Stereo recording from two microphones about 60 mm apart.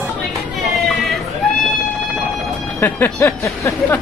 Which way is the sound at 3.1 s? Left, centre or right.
Left.